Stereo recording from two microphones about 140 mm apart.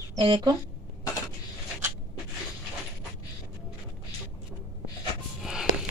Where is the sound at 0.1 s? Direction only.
35° right (ahead or behind).